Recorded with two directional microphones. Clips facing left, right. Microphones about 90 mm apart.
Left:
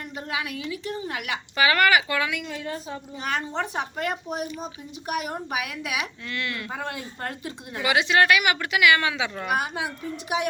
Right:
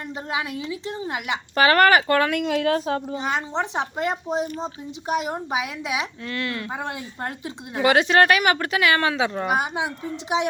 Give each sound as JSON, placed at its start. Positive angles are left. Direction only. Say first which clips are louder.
{"t": 0.3, "sound": "speech", "louder": "right 3 dB", "side_deg": -25}
{"t": 1.5, "sound": "speech", "louder": "right 4 dB", "side_deg": -40}
{"t": 2.5, "sound": "a woman's voice", "louder": "right 11 dB", "side_deg": -75}
{"t": 3.2, "sound": "speech", "louder": "right 3 dB", "side_deg": -20}
{"t": 6.7, "sound": "speech", "louder": "right 2 dB", "side_deg": -20}
{"t": 7.8, "sound": "speech", "louder": "right 4 dB", "side_deg": -45}